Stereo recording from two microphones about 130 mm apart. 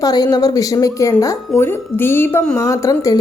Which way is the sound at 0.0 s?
30° left (ahead or behind).